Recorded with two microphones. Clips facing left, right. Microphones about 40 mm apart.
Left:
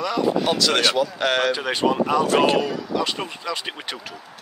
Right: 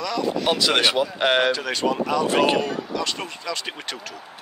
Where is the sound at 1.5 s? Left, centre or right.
Centre.